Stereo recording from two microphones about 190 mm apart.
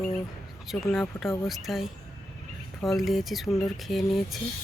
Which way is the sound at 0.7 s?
Centre (ahead or behind).